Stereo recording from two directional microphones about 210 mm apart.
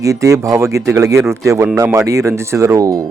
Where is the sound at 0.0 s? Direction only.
15° right (ahead or behind).